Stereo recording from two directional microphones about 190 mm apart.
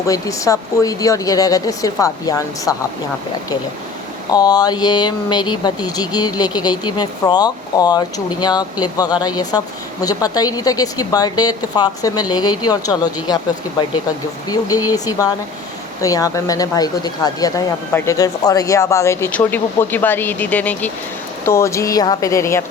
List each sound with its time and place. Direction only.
0.1 s speech: 15° left (ahead or behind)
4.3 s speech: 20° left (ahead or behind)
14.5 s speech: 20° left (ahead or behind)